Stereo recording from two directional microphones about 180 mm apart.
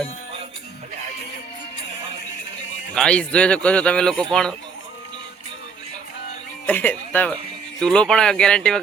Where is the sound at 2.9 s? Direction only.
5° left (ahead or behind).